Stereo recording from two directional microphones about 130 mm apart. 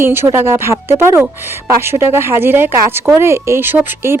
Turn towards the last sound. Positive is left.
turn(degrees=-15)  # may be behind; listen again after turning